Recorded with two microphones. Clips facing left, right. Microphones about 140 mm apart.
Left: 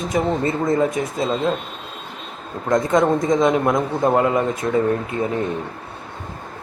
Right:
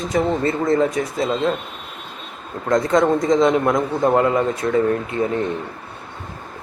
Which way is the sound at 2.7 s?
20° left (ahead or behind).